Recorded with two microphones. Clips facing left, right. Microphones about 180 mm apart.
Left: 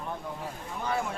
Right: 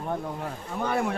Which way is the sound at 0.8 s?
60° right (ahead or behind).